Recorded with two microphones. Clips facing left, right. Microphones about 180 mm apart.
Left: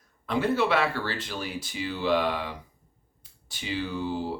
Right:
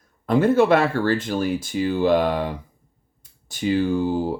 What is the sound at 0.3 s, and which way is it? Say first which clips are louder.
Speech: right 8 dB; 45° right (ahead or behind).